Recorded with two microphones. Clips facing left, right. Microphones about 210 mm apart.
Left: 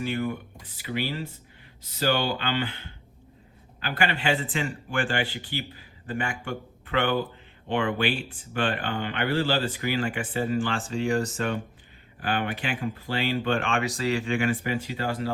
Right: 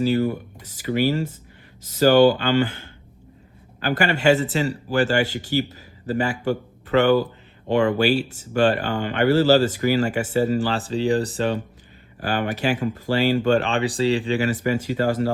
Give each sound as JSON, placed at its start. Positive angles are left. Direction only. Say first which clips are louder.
{"t": 0.0, "sound": "speech", "louder": "right 8 dB", "side_deg": -40}
{"t": 14.6, "sound": "speech", "louder": "right 8 dB", "side_deg": -45}